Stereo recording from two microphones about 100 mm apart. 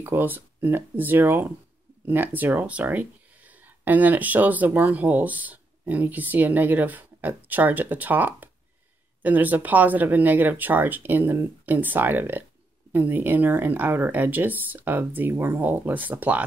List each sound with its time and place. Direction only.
0.0 s speech: 20° right (ahead or behind)